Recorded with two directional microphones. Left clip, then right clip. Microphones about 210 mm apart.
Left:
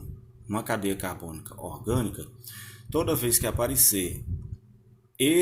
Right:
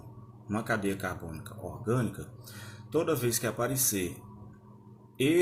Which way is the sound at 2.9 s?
30° left (ahead or behind).